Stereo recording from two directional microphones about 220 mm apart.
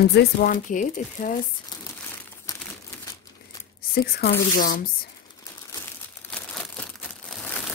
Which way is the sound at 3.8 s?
45° left (ahead or behind).